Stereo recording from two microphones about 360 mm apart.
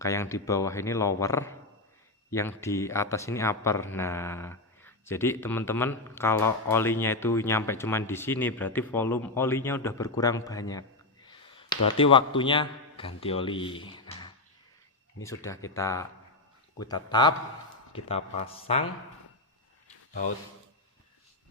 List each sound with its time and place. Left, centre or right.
0.0 s speech: centre
11.3 s a sound: centre
11.9 s speech: centre